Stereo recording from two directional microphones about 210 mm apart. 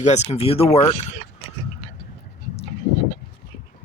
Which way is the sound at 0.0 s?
35° left (ahead or behind).